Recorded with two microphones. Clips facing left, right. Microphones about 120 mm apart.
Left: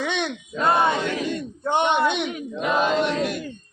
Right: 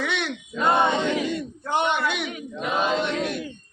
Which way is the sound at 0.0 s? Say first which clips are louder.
Left 2 dB; 20° left (ahead or behind).